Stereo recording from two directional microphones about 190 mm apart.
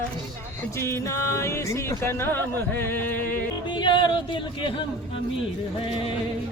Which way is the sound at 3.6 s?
25° left (ahead or behind).